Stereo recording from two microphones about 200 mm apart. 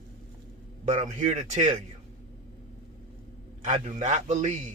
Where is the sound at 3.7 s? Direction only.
35° right (ahead or behind).